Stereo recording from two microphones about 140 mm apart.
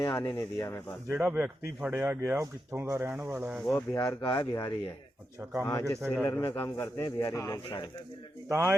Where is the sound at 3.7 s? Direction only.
20° left (ahead or behind).